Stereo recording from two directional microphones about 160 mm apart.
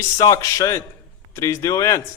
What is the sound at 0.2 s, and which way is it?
A man's voice, 20° left (ahead or behind).